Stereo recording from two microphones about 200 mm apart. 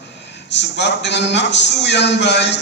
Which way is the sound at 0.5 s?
60° left (ahead or behind).